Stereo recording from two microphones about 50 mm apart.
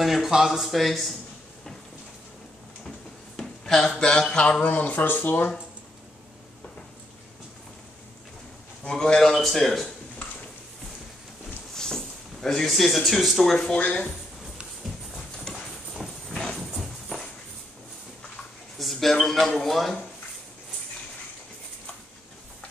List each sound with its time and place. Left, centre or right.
0.0 s speech: centre
3.6 s speech: centre
4.0 s a sound: centre
4.6 s speech: left
8.8 s a sound: centre
9.3 s speech: centre
11.7 s speech: centre
13.7 s speech: left
15.1 s clip-clop: centre
15.9 s a sound: centre
16.3 s a sound: centre
18.8 s speech: centre